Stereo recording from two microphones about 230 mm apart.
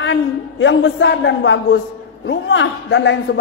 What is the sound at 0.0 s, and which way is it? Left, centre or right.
A man's voice, left.